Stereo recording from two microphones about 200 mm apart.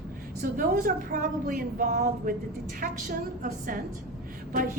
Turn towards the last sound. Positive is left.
turn(degrees=-40)  # may be behind; listen again after turning